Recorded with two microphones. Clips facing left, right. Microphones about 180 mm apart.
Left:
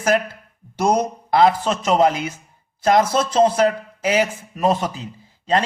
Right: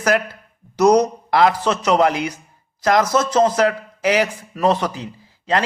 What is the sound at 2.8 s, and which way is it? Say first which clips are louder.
Speech: left 1 dB; 30° left (ahead or behind).